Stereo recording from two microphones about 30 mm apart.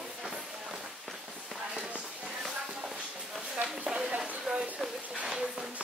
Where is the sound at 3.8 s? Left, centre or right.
Right.